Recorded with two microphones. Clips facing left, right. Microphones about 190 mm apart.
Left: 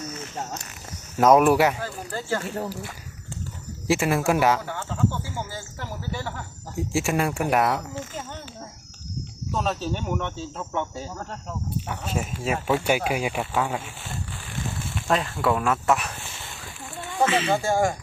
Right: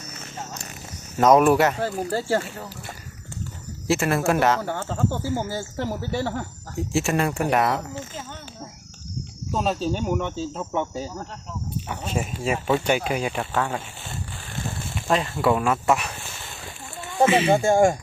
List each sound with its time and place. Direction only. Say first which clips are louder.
1.1 s speech: right 1 dB; 5° left (ahead or behind)
2.0 s speech: right 3 dB; 35° right (ahead or behind)
3.8 s speech: even; 10° left (ahead or behind)
4.6 s speech: right 1 dB; 45° right (ahead or behind)
5.5 s speech: right 8 dB; 30° right (ahead or behind)
6.7 s speech: right 1 dB; 10° left (ahead or behind)
9.5 s speech: right 3 dB; 10° right (ahead or behind)
12.1 s speech: right 2 dB; centre (ahead or behind)
15.0 s speech: right 2 dB; centre (ahead or behind)
17.2 s speech: right 4 dB; 10° right (ahead or behind)